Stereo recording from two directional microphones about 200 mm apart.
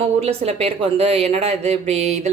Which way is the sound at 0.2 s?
30° right (ahead or behind).